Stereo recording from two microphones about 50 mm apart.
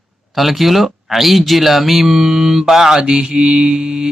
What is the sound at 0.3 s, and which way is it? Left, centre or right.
Speech, centre.